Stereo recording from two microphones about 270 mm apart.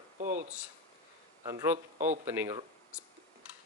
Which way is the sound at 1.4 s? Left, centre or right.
Centre.